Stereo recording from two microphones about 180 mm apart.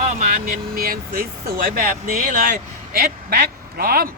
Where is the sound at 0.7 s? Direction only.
55° right (ahead or behind).